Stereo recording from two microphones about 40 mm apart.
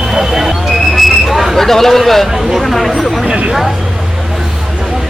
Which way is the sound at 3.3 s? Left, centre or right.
Right.